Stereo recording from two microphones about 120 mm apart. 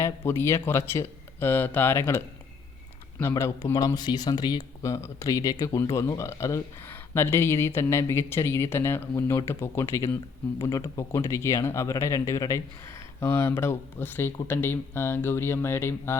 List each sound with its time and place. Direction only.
0.0 s a man's voice: 20° left (ahead or behind)